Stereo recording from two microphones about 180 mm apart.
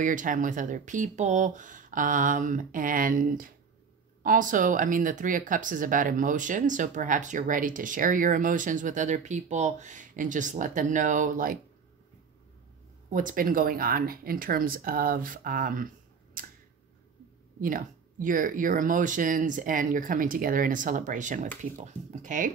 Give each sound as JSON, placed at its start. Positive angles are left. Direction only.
{"t": 0.0, "sound": "speech", "side_deg": -45}
{"t": 13.1, "sound": "speech", "side_deg": -50}
{"t": 16.4, "sound": "a sound", "side_deg": -50}
{"t": 17.6, "sound": "speech", "side_deg": -50}